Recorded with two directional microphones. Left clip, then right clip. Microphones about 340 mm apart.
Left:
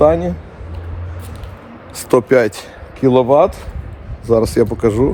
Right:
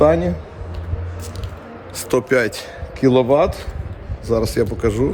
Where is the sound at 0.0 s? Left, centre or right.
Centre.